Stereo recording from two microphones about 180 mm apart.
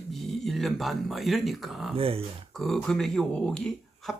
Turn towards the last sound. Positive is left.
turn(degrees=5)  # may be behind; listen again after turning